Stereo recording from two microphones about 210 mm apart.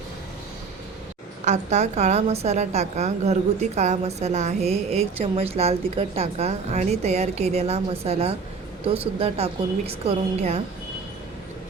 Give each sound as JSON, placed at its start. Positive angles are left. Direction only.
{"t": 1.5, "sound": "a woman's voice", "side_deg": -35}